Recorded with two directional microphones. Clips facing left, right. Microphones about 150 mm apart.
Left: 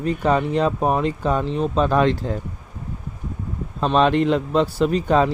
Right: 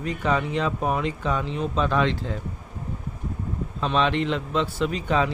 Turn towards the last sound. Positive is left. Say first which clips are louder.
# left 6 dB
turn(degrees=40)  # may be behind; listen again after turning